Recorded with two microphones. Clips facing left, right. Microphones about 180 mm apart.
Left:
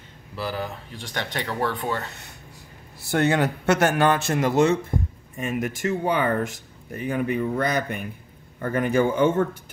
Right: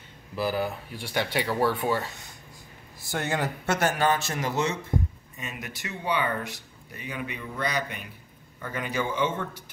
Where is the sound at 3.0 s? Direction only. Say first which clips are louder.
Left 8 dB; 65° left (ahead or behind); by 9.4 s 50° left (ahead or behind).